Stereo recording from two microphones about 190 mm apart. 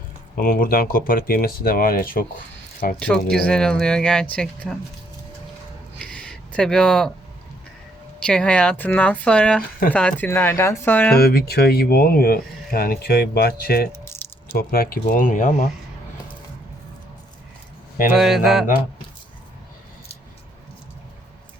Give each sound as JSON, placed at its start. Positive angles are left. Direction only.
{"t": 0.3, "sound": "speech", "side_deg": 50}
{"t": 3.0, "sound": "speech", "side_deg": 5}
{"t": 6.0, "sound": "a sound", "side_deg": 5}
{"t": 8.2, "sound": "speech", "side_deg": 5}
{"t": 11.2, "sound": "speech", "side_deg": 55}
{"t": 13.9, "sound": "keys jangling", "side_deg": 15}
{"t": 14.5, "sound": "speech", "side_deg": 50}
{"t": 18.2, "sound": "speech", "side_deg": 0}